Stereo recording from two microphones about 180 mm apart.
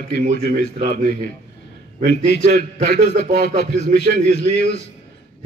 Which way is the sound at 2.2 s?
70° left (ahead or behind).